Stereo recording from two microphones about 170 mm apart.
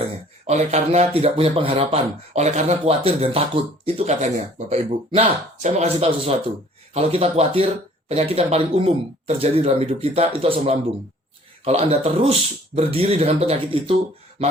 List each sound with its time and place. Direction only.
0.0 s speech: 40° right (ahead or behind)